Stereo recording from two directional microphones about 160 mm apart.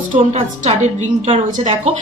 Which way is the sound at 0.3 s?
40° right (ahead or behind).